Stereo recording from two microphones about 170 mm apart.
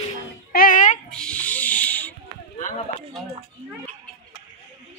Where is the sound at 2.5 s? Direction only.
45° left (ahead or behind).